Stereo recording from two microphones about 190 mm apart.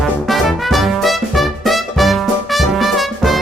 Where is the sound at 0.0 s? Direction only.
Centre (ahead or behind).